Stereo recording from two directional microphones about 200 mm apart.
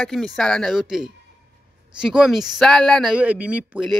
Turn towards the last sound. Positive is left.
turn(degrees=-5)  # may be behind; listen again after turning